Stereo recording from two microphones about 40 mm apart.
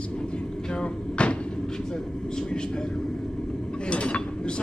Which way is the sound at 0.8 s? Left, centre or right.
Left.